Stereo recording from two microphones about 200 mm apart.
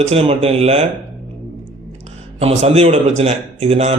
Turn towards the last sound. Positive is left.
turn(degrees=-30)  # may be behind; listen again after turning